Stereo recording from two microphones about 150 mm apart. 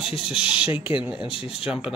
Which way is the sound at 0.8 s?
35° left (ahead or behind).